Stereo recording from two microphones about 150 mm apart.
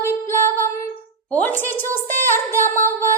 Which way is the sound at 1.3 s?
10° left (ahead or behind).